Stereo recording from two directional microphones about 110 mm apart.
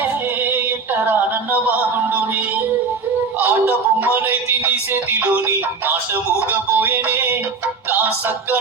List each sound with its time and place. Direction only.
0.5 s music: 20° right (ahead or behind)
3.4 s music: 15° right (ahead or behind)